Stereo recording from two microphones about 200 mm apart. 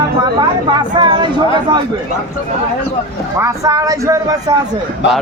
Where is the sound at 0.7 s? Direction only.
20° right (ahead or behind).